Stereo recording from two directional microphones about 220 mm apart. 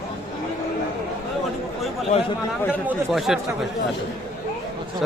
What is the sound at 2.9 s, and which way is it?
Speech, centre (ahead or behind).